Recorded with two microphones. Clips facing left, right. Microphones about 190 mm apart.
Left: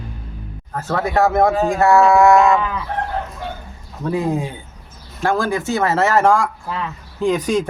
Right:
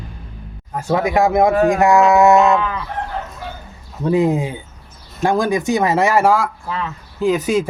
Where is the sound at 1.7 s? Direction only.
15° right (ahead or behind).